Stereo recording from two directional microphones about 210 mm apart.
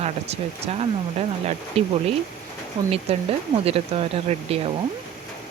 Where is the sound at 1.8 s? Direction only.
30° right (ahead or behind).